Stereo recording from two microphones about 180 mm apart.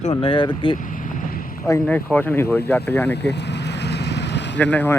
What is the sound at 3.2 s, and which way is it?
Vehicle, 70° left (ahead or behind).